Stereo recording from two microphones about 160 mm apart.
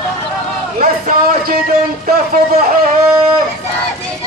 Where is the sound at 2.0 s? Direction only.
65° right (ahead or behind).